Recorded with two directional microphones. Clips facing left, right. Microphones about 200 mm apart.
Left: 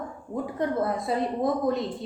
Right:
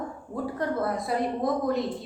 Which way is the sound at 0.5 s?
20° left (ahead or behind).